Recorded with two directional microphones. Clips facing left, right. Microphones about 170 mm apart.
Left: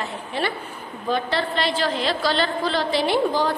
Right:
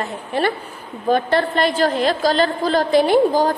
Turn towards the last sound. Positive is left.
turn(degrees=-45)  # may be behind; listen again after turning